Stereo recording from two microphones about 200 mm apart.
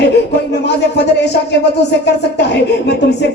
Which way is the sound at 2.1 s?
60° left (ahead or behind).